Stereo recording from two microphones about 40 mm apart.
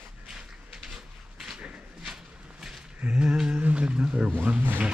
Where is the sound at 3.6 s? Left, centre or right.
Right.